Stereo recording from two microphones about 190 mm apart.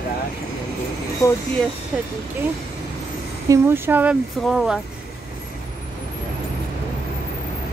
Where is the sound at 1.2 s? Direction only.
15° left (ahead or behind).